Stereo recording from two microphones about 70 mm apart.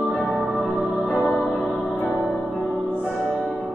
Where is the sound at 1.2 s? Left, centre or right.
Centre.